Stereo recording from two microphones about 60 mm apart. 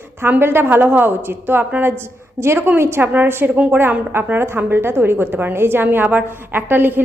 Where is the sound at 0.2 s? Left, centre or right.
Right.